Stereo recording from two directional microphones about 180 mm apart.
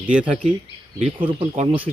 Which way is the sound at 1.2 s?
30° right (ahead or behind).